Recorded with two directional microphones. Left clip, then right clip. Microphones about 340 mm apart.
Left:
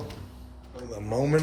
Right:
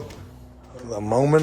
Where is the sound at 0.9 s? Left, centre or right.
Right.